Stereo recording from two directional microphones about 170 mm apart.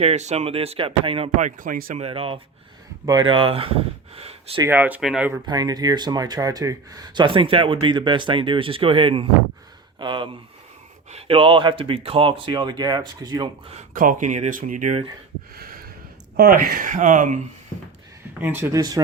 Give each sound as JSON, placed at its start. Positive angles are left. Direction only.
{"t": 0.0, "sound": "speech", "side_deg": -40}
{"t": 2.0, "sound": "speech", "side_deg": -35}
{"t": 4.6, "sound": "speech", "side_deg": -10}
{"t": 5.5, "sound": "speech", "side_deg": -25}
{"t": 13.9, "sound": "speech", "side_deg": -55}
{"t": 16.4, "sound": "speech", "side_deg": -55}
{"t": 18.3, "sound": "speech", "side_deg": -10}